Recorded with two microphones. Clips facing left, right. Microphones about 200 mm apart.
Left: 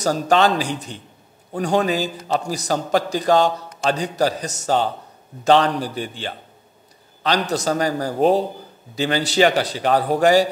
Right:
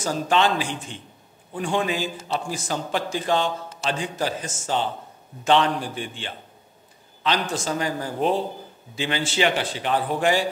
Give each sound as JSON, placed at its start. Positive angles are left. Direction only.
{"t": 0.0, "sound": "a man's voice", "side_deg": 40}